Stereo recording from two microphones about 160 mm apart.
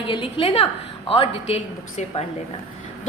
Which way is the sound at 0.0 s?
30° left (ahead or behind).